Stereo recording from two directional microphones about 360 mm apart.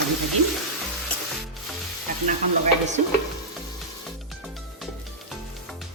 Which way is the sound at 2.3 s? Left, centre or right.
Centre.